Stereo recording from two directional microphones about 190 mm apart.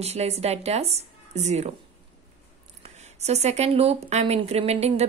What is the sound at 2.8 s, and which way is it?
Speech, 35° right (ahead or behind).